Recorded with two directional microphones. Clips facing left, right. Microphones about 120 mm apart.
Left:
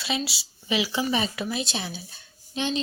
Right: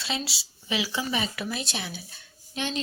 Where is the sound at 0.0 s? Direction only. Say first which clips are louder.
Left 3 dB; 10° left (ahead or behind).